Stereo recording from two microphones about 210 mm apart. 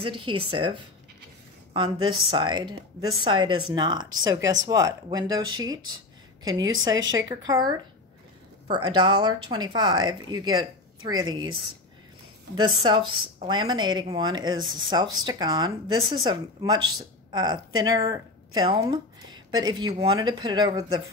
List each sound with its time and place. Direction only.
0.1 s speech: 25° right (ahead or behind)
12.5 s speech: 20° right (ahead or behind)